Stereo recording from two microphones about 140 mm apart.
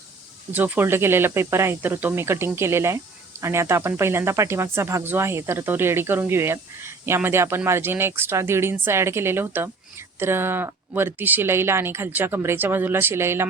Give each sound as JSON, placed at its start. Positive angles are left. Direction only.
{"t": 0.5, "sound": "speech", "side_deg": -10}